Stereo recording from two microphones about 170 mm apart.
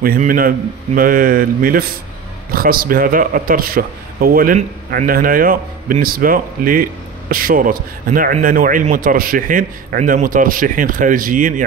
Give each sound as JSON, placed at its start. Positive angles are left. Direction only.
{"t": 0.0, "sound": "a man's voice", "side_deg": -55}